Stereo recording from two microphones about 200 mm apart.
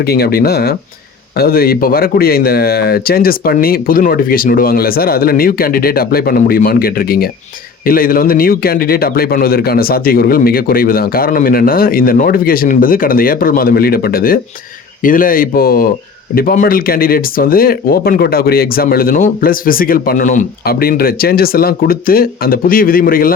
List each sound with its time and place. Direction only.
0.0 s speech: 50° left (ahead or behind)